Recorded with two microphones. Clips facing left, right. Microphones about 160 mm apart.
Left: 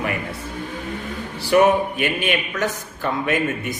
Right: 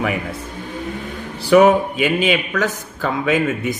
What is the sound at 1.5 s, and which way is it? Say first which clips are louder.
Speech: right 4 dB; 90° right.